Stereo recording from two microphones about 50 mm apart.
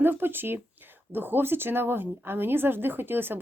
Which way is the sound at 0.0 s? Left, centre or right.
Right.